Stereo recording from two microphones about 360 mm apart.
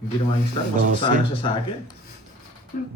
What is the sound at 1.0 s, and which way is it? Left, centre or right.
Speech, centre.